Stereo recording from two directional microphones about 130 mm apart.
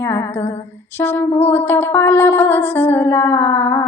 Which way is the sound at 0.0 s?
20° left (ahead or behind).